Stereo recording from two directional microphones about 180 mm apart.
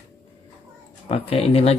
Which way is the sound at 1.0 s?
35° left (ahead or behind).